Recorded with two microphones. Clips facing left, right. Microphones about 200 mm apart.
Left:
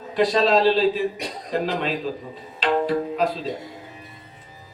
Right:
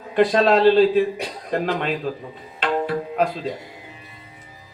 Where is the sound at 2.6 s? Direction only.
55° right (ahead or behind).